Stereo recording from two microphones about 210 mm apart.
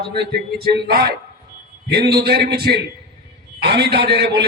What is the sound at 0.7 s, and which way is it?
A man's voice, 50° right (ahead or behind).